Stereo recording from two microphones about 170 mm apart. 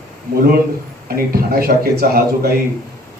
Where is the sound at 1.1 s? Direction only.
60° right (ahead or behind).